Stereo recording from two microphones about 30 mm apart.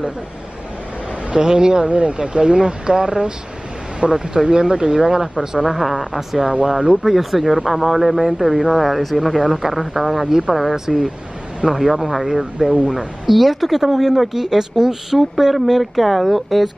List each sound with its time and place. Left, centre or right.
1.3 s speech: right
1.9 s speech: right
2.3 s speech: right
4.0 s speech: right
4.5 s speech: right
5.8 s speech: centre
6.7 s speech: right
7.0 s speech: centre
10.2 s speech: right
10.5 s speech: centre
11.9 s speech: centre
15.5 s speech: centre